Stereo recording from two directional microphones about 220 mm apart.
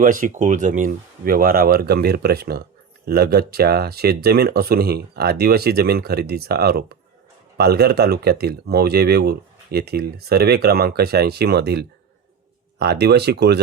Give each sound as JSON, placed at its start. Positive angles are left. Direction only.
{"t": 0.0, "sound": "speech", "side_deg": -40}